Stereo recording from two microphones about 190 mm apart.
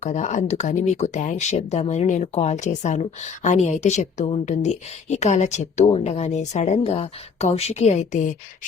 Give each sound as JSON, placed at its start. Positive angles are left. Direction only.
{"t": 0.0, "sound": "speech", "side_deg": 40}